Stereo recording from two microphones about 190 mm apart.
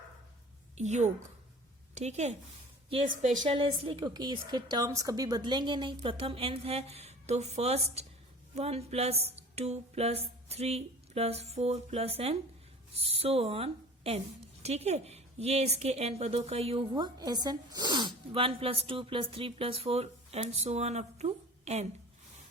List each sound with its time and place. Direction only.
0.8 s a woman's voice: 35° right (ahead or behind)
3.8 s a woman's voice: 25° right (ahead or behind)